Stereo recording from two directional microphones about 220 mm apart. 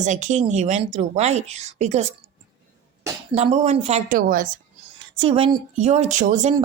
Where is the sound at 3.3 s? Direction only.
30° right (ahead or behind).